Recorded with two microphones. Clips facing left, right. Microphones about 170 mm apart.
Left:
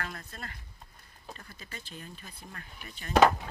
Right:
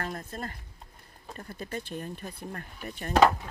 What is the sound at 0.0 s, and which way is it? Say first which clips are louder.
Speech: right 6 dB; 35° right (ahead or behind).